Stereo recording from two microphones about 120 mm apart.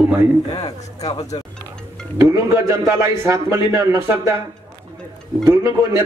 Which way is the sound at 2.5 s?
25° right (ahead or behind).